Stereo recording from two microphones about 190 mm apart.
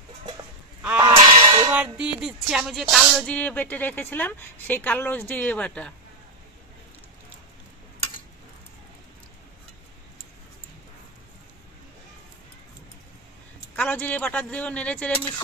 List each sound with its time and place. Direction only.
1.0 s sheep: 25° right (ahead or behind)
1.7 s speech: 5° right (ahead or behind)
13.7 s speech: 10° left (ahead or behind)